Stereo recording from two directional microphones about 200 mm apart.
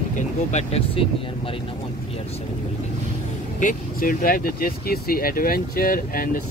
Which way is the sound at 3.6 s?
40° left (ahead or behind).